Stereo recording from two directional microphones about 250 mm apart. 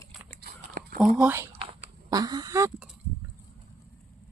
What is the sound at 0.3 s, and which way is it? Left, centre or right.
Biting, right.